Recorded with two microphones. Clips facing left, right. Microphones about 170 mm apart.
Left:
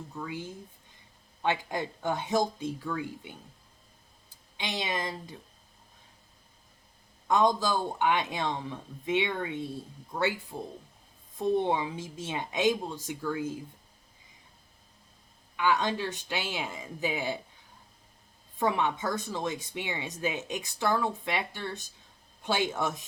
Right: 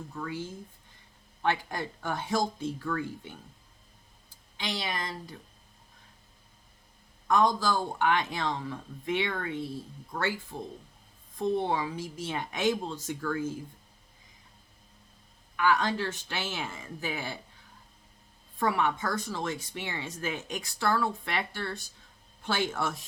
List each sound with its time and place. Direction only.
0.1 s speech: 15° left (ahead or behind)
4.5 s speech: 20° left (ahead or behind)
7.3 s speech: 20° left (ahead or behind)
11.3 s speech: 20° left (ahead or behind)
15.5 s speech: 20° left (ahead or behind)
18.6 s speech: 20° left (ahead or behind)